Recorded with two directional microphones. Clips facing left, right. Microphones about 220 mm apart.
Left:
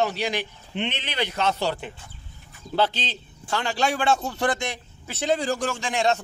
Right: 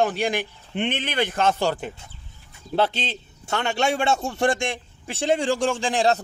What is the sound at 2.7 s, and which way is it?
A man's voice, 25° right (ahead or behind).